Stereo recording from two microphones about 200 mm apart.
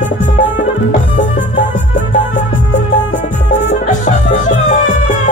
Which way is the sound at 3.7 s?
35° left (ahead or behind).